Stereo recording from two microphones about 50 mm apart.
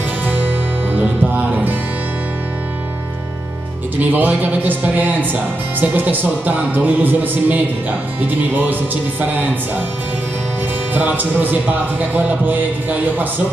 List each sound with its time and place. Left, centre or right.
0.9 s music: right
4.0 s speech: right
10.9 s speech: right